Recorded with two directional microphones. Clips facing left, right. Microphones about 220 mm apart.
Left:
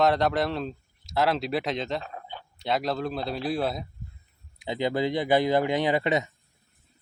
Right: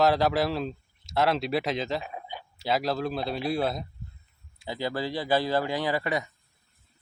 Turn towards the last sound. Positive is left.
turn(degrees=20)  # may be behind; listen again after turning